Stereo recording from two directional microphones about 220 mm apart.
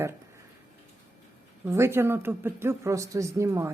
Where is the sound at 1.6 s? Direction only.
10° right (ahead or behind).